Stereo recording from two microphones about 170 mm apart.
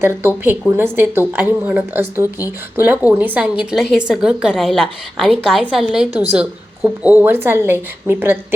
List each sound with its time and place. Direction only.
0.0 s a woman's voice: 15° right (ahead or behind)